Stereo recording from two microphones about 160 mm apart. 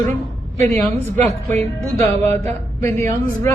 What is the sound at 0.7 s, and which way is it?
A woman's voice, 10° left (ahead or behind).